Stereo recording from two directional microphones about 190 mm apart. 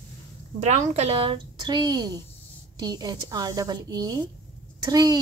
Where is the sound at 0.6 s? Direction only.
40° right (ahead or behind).